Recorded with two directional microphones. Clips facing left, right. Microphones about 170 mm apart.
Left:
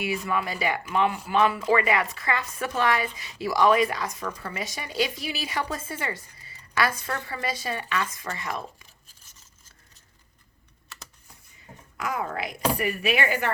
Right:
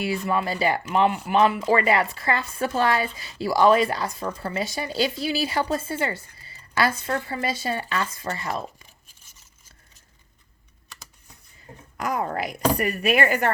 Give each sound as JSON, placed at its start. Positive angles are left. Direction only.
{"t": 0.3, "sound": "speech", "side_deg": -30}
{"t": 12.0, "sound": "speech", "side_deg": -40}